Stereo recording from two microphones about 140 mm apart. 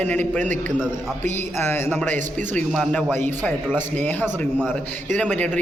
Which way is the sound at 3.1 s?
15° left (ahead or behind).